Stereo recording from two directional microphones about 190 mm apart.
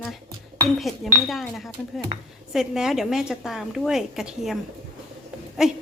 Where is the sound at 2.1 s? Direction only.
30° right (ahead or behind).